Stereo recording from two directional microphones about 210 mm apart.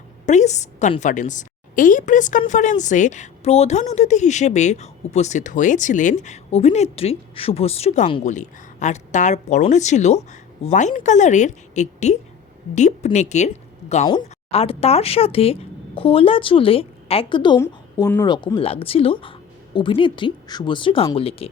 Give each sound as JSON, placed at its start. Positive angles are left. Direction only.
{"t": 0.3, "sound": "a woman's voice", "side_deg": 35}